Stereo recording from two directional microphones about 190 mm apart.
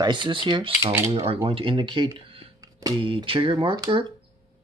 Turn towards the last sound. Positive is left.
turn(degrees=-25)  # may be behind; listen again after turning